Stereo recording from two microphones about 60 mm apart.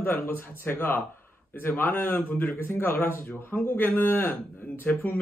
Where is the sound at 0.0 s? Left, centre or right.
Left.